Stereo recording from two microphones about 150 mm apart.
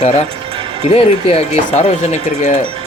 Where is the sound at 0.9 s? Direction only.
40° left (ahead or behind).